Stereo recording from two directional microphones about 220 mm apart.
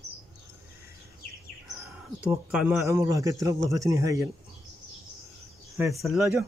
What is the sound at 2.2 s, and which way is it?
Speech, 5° right (ahead or behind).